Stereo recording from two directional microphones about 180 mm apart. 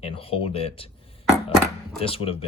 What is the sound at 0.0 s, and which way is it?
Speech, 30° left (ahead or behind).